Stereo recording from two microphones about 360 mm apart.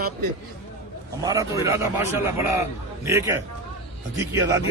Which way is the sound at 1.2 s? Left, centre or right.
Centre.